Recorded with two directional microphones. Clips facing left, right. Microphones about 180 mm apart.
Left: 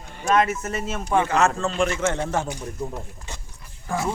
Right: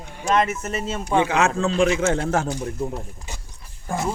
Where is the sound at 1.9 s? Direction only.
90° right.